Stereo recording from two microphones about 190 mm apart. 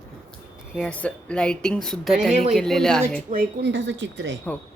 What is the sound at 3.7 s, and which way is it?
Speech, 70° right (ahead or behind).